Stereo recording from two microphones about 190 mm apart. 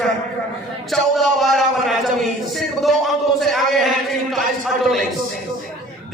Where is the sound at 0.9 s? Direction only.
Centre (ahead or behind).